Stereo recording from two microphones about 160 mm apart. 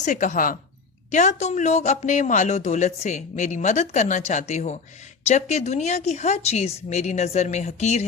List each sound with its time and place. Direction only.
0.0 s a man's voice: 50° left (ahead or behind)
1.1 s a man's voice: 45° left (ahead or behind)